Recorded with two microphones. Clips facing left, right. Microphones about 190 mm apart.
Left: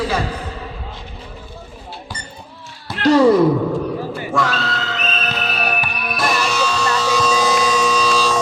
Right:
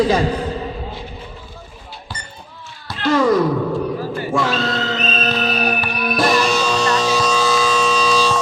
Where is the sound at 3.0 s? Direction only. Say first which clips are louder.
Left 4 dB; 35° left (ahead or behind).